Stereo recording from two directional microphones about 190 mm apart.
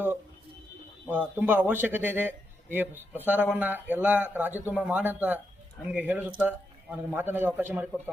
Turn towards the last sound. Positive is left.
turn(degrees=-10)  # may be behind; listen again after turning